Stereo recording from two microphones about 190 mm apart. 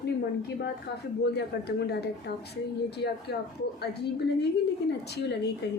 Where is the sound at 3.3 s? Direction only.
60° left (ahead or behind).